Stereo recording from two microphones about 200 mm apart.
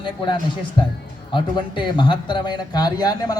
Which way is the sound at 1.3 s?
25° left (ahead or behind).